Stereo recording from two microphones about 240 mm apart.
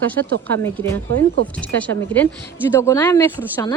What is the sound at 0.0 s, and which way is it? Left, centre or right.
A woman's voice, centre.